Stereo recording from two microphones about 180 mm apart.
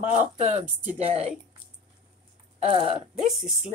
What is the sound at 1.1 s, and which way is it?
Speech, 35° right (ahead or behind).